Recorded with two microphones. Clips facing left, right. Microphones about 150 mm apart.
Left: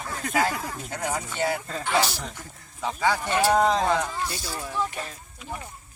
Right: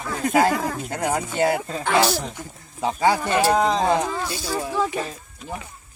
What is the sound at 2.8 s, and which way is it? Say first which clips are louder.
Speech: right 5 dB; 40° right (ahead or behind).